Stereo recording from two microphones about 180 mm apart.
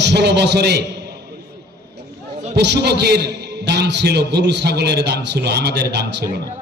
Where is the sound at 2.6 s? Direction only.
70° right (ahead or behind).